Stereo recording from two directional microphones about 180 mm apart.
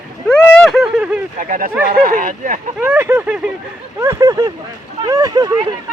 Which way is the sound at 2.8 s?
10° right (ahead or behind).